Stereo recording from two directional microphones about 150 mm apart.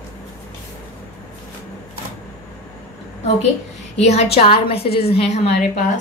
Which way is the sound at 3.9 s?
45° left (ahead or behind).